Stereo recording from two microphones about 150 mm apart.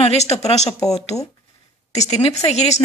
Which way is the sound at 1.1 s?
Centre (ahead or behind).